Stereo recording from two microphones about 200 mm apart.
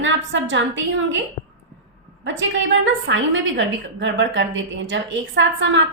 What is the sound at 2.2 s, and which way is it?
A woman's voice, 70° right (ahead or behind).